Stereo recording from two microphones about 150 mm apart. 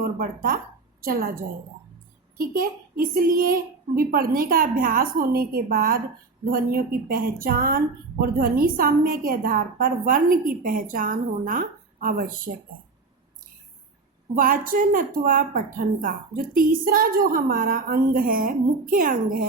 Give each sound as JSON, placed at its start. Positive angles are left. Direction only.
{"t": 0.2, "sound": "a woman's voice", "side_deg": -75}
{"t": 2.4, "sound": "a woman's voice", "side_deg": -75}
{"t": 14.3, "sound": "a woman's voice", "side_deg": -65}